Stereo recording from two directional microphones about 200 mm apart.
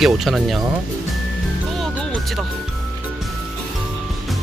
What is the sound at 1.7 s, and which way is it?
Music, 5° left (ahead or behind).